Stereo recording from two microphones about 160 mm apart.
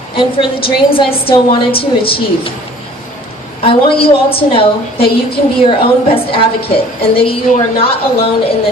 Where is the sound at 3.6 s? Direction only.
35° left (ahead or behind).